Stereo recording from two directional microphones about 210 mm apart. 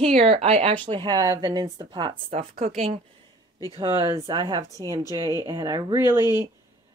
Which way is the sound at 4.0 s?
15° right (ahead or behind).